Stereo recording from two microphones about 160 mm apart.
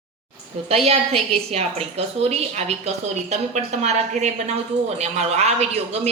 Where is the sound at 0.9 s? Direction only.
40° right (ahead or behind).